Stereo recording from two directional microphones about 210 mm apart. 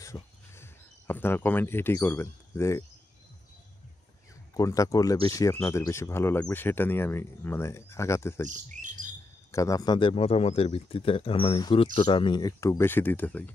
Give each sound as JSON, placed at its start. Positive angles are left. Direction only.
{"t": 0.0, "sound": "a sound", "side_deg": 15}
{"t": 4.6, "sound": "speech", "side_deg": 15}
{"t": 8.5, "sound": "speech", "side_deg": -35}
{"t": 9.5, "sound": "speech", "side_deg": 15}